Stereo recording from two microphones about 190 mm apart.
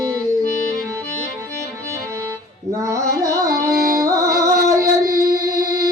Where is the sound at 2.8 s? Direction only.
15° right (ahead or behind).